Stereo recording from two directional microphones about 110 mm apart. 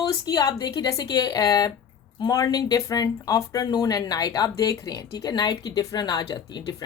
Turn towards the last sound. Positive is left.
turn(degrees=40)  # may be behind; listen again after turning